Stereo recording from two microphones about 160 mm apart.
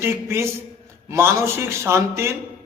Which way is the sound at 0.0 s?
15° right (ahead or behind).